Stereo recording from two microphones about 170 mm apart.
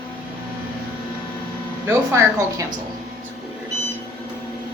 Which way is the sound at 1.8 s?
15° right (ahead or behind).